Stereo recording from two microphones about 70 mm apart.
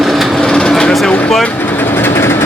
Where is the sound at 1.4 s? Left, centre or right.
Left.